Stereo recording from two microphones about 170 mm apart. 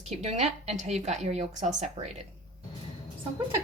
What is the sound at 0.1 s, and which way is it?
A woman's voice, 40° right (ahead or behind).